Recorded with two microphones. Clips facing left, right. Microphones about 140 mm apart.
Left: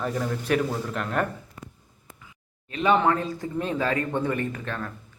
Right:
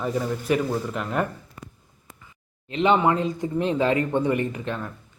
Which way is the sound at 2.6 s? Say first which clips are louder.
Right 2 dB; 25° right (ahead or behind).